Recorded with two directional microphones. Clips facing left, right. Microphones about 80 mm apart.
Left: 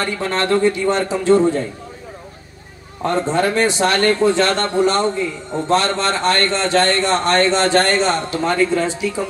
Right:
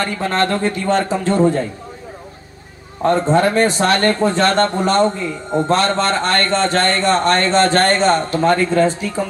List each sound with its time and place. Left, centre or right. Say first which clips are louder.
0.0 s a man's voice: right 2 dB; right
3.1 s speech: right 3 dB; right